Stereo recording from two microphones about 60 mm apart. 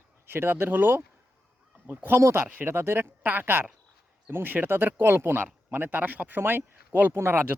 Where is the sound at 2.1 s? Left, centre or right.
Right.